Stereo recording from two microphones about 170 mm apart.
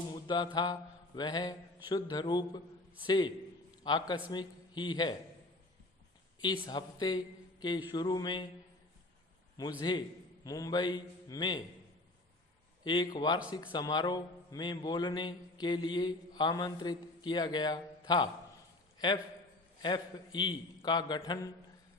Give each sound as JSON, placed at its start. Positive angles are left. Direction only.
{"t": 0.1, "sound": "mantra", "side_deg": 30}
{"t": 0.5, "sound": "a man's voice", "side_deg": 25}
{"t": 6.4, "sound": "a man's voice", "side_deg": 25}
{"t": 9.6, "sound": "a man's voice", "side_deg": 20}
{"t": 12.8, "sound": "a man's voice", "side_deg": 25}